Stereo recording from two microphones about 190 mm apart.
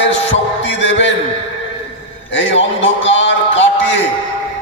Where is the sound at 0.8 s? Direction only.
75° left (ahead or behind).